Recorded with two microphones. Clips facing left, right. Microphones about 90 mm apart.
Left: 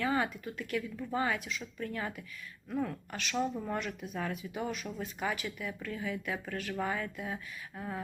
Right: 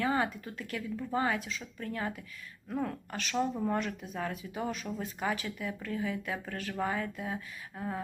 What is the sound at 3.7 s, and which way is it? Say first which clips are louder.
Speech: right 3 dB; 35° right (ahead or behind).